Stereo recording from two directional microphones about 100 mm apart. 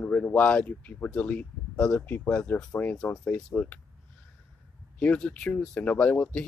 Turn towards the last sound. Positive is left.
turn(degrees=15)  # may be behind; listen again after turning